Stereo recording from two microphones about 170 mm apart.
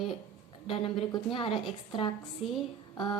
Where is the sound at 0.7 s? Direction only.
30° left (ahead or behind).